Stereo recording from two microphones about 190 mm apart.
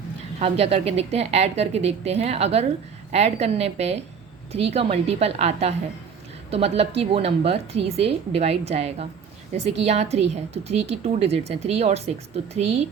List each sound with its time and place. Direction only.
0.3 s speech: 30° right (ahead or behind)